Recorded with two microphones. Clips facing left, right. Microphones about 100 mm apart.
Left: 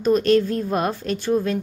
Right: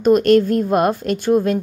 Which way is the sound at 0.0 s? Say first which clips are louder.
Right 5 dB; 55° right (ahead or behind).